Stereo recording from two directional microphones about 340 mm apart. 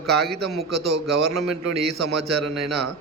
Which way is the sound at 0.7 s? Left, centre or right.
Right.